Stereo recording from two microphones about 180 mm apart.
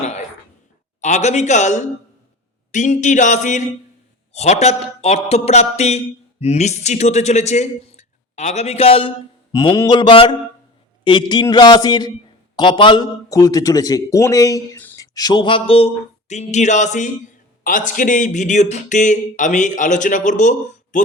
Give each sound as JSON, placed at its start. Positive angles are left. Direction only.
{"t": 1.0, "sound": "speech", "side_deg": 40}
{"t": 9.5, "sound": "speech", "side_deg": 20}